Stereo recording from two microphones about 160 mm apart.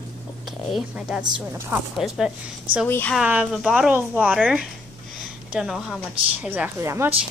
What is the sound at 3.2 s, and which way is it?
A woman's voice, 5° right (ahead or behind).